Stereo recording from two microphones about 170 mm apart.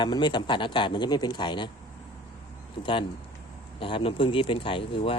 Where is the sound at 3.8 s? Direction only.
30° left (ahead or behind).